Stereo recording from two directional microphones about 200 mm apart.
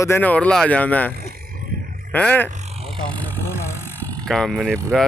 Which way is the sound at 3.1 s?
10° left (ahead or behind).